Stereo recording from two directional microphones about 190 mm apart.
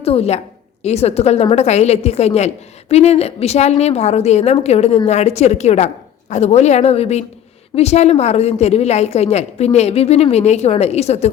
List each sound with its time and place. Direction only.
0.0 s a woman's voice: 30° left (ahead or behind)